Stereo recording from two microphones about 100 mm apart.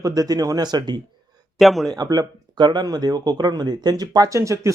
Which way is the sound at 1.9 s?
40° right (ahead or behind).